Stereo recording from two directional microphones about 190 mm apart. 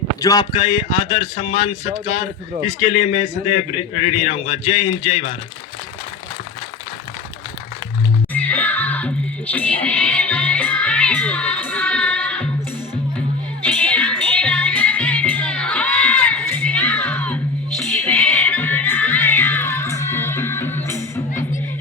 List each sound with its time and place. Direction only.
0.2 s a man's voice: 20° left (ahead or behind)
8.3 s music: 10° left (ahead or behind)
13.7 s music: 10° left (ahead or behind)